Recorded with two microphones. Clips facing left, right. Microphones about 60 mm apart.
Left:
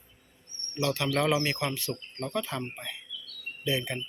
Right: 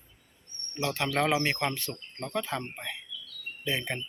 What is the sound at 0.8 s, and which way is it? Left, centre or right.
Speech, right.